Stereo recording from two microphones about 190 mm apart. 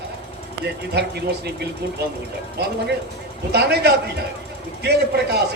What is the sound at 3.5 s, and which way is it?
A man's voice, 60° right (ahead or behind).